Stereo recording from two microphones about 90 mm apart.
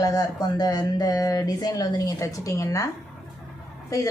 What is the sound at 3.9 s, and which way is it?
Speech, 40° left (ahead or behind).